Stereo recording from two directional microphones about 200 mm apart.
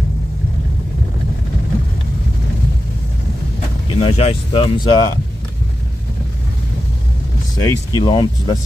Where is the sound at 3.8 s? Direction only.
30° left (ahead or behind).